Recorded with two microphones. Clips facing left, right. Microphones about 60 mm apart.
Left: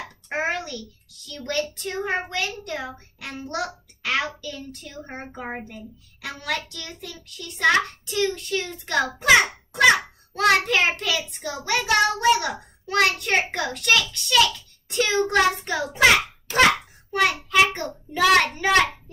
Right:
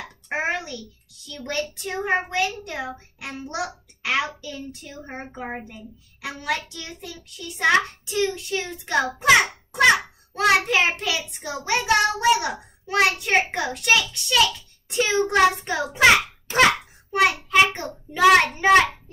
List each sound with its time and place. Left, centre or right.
0.3 s a sound: centre
1.3 s child singing: right
2.6 s a child's voice: right
4.4 s child singing: centre
6.2 s child singing: centre
16.4 s a sound: right
17.5 s child singing: right